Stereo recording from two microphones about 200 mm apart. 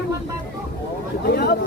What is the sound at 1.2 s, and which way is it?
Speech, 50° left (ahead or behind).